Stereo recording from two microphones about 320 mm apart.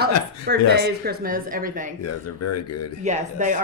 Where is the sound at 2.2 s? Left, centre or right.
Left.